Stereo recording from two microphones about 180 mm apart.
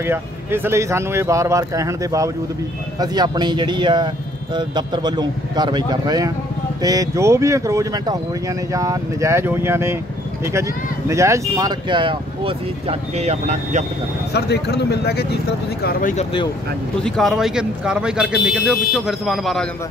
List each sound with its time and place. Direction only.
0.0 s speech: 15° right (ahead or behind); by 13.8 s 40° right (ahead or behind)
14.3 s speech: 65° left (ahead or behind)
15.8 s speech: 50° left (ahead or behind)
17.0 s speech: centre (ahead or behind)